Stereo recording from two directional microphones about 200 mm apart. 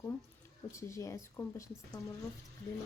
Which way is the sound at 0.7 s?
15° left (ahead or behind).